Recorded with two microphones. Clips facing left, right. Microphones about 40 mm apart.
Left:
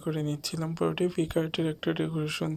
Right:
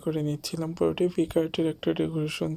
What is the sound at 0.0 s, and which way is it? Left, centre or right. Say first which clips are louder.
Speech: right 3 dB; centre.